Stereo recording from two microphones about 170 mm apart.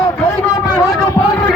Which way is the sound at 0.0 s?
20° left (ahead or behind).